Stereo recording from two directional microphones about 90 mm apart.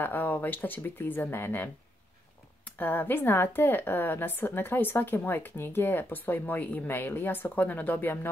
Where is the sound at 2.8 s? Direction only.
20° left (ahead or behind).